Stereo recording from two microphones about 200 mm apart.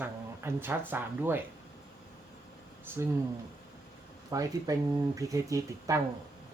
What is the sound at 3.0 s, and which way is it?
Speech, 15° right (ahead or behind).